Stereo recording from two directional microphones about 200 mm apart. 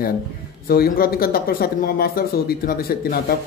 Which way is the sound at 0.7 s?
50° left (ahead or behind).